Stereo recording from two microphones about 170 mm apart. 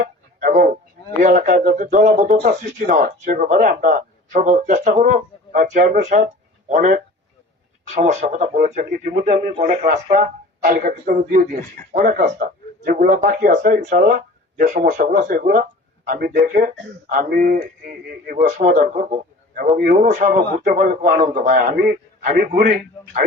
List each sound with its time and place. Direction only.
0.0 s music: 50° right (ahead or behind)
1.2 s speech: 50° right (ahead or behind)
8.5 s a man's voice: 55° right (ahead or behind)
18.3 s a man's voice: 45° right (ahead or behind)
19.7 s a man's voice: 75° right (ahead or behind)
20.0 s a man's voice: 50° right (ahead or behind)